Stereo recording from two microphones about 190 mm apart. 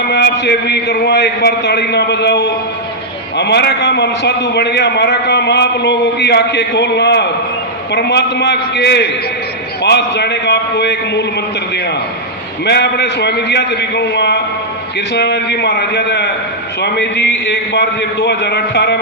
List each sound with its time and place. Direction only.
0.1 s a man's voice: 60° left (ahead or behind)
12.6 s a man's voice: 60° left (ahead or behind)